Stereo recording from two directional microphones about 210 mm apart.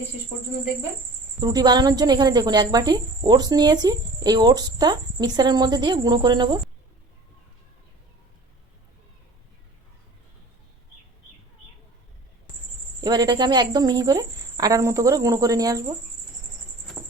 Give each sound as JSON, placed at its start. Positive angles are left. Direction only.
{"t": 1.4, "sound": "speech", "side_deg": -20}
{"t": 13.0, "sound": "speech", "side_deg": -20}